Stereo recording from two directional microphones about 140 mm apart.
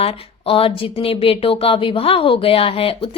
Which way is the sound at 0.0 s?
40° left (ahead or behind).